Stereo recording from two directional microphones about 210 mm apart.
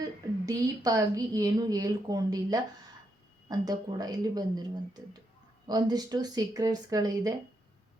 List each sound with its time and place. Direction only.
0.0 s a woman's voice: 15° right (ahead or behind)
3.7 s a woman's voice: 20° right (ahead or behind)